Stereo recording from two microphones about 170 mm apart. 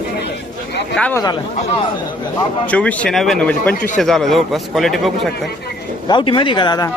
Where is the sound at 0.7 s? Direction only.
85° left.